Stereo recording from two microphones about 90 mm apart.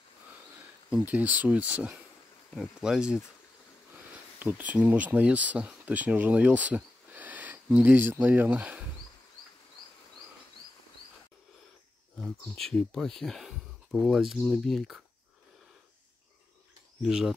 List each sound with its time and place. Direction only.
0.8 s speech: 15° right (ahead or behind)
2.5 s speech: 5° right (ahead or behind)
4.4 s speech: 20° right (ahead or behind)
12.2 s speech: 5° left (ahead or behind)
17.0 s speech: 5° right (ahead or behind)